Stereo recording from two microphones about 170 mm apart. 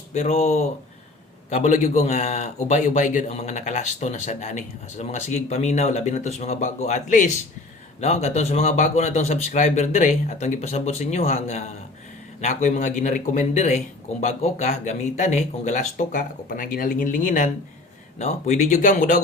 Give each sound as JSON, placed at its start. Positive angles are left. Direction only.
{"t": 0.1, "sound": "a man's voice", "side_deg": 45}